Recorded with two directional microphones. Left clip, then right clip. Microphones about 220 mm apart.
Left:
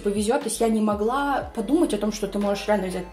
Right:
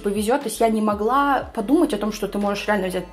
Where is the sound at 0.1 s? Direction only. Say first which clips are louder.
Right 2 dB; 20° right (ahead or behind).